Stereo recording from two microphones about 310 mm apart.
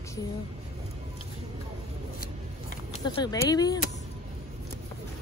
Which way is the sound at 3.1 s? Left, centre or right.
Centre.